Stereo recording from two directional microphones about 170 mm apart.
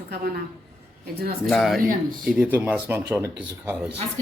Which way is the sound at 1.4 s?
Centre (ahead or behind).